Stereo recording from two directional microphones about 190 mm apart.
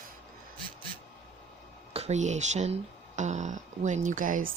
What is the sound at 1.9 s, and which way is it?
Speech, 35° right (ahead or behind).